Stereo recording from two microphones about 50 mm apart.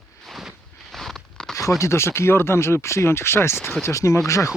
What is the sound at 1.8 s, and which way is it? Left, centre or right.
Speech, left.